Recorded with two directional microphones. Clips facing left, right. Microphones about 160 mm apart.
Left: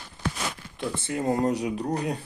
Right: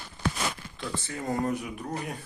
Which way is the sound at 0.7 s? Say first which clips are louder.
Left 6 dB; 20° left (ahead or behind).